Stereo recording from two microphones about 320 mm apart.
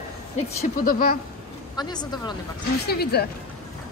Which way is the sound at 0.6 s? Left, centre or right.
Left.